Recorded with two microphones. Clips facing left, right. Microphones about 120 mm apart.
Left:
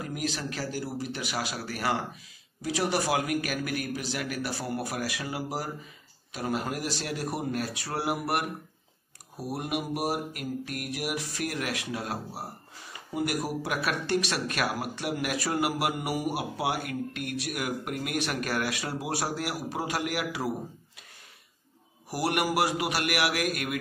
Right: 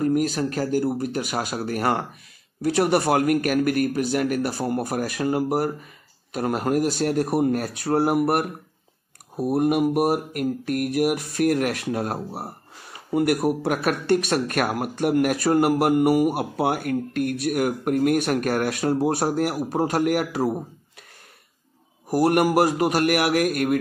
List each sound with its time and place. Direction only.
0.0 s mantra: 45° right (ahead or behind)
22.1 s mantra: 50° right (ahead or behind)